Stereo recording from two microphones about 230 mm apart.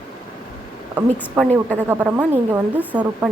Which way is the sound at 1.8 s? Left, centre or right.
Centre.